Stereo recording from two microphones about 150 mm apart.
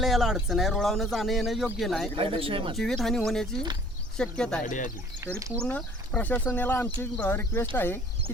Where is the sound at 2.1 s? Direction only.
35° right (ahead or behind).